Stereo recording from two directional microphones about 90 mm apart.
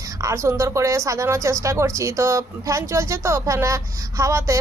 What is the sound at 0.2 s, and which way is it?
A woman's voice, 35° right (ahead or behind).